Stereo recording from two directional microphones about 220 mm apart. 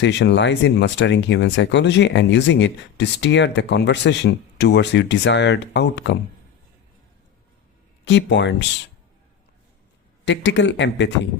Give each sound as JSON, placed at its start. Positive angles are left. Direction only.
{"t": 0.0, "sound": "speech", "side_deg": 50}
{"t": 8.0, "sound": "speech", "side_deg": 55}
{"t": 10.2, "sound": "speech", "side_deg": 55}